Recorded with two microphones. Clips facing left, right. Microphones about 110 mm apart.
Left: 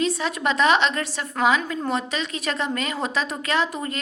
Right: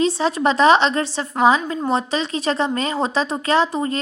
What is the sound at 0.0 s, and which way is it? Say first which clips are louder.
A woman's voice: right 6 dB; 30° right (ahead or behind).